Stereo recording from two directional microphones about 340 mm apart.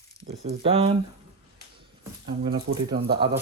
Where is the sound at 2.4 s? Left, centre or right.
Centre.